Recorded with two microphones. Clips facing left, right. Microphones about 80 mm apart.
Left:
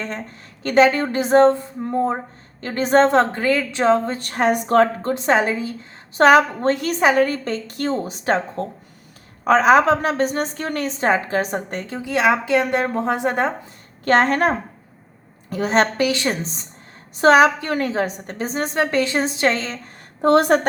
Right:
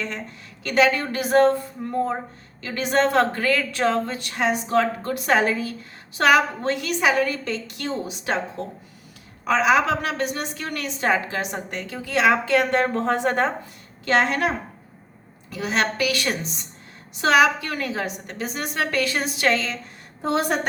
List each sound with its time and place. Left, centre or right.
0.6 s a woman's voice: left
2.6 s a woman's voice: left
4.2 s a woman's voice: left
5.0 s a woman's voice: left
6.1 s a woman's voice: left
11.9 s speech: centre
14.0 s a woman's voice: left
20.2 s a woman's voice: left